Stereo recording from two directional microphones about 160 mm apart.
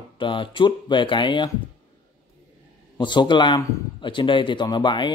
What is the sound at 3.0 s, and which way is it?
Speech, 30° left (ahead or behind).